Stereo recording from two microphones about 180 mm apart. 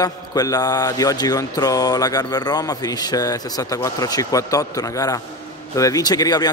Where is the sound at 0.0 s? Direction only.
20° left (ahead or behind).